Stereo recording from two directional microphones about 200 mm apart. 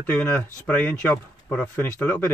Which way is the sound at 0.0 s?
5° left (ahead or behind).